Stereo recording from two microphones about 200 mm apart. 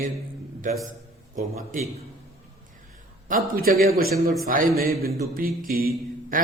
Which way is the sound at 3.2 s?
45° right (ahead or behind).